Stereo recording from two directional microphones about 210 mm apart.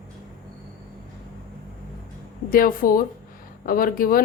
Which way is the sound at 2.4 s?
40° left (ahead or behind).